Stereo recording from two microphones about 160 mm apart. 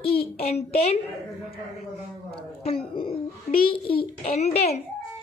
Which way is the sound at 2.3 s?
35° left (ahead or behind).